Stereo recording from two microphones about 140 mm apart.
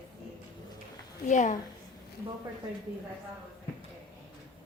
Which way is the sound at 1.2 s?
60° left (ahead or behind).